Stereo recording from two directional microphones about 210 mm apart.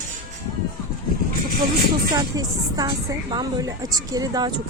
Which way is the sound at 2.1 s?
15° right (ahead or behind).